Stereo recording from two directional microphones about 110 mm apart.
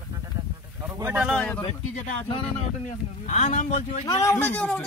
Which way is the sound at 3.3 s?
90° left.